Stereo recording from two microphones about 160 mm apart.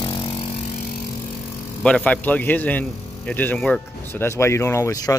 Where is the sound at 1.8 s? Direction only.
5° left (ahead or behind).